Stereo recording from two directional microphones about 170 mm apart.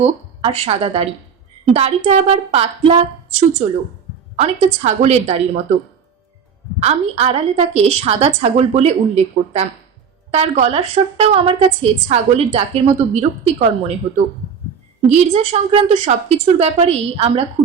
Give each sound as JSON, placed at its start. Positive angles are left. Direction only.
{"t": 0.0, "sound": "a woman's voice", "side_deg": -35}
{"t": 6.7, "sound": "a woman's voice", "side_deg": -40}
{"t": 15.1, "sound": "a woman's voice", "side_deg": -40}